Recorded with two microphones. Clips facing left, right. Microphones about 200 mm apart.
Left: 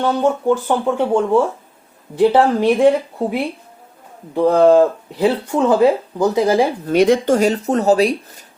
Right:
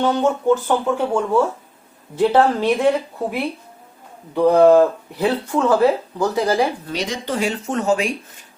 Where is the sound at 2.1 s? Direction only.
15° left (ahead or behind).